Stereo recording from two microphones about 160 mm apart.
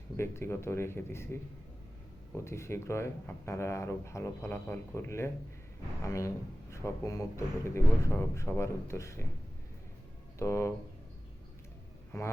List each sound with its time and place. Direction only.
0.2 s speech: 15° left (ahead or behind)
10.3 s speech: 20° left (ahead or behind)